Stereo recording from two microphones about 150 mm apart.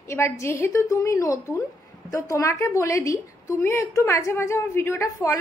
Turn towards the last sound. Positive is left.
turn(degrees=20)  # may be behind; listen again after turning